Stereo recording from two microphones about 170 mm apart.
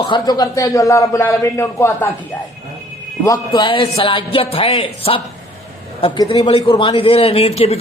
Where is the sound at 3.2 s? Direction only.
25° left (ahead or behind).